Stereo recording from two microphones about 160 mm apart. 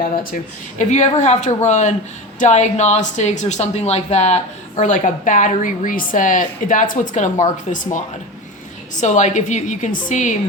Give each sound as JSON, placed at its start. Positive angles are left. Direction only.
{"t": 0.8, "sound": "a woman's voice", "side_deg": 45}